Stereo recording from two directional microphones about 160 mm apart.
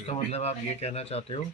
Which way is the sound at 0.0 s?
40° left (ahead or behind).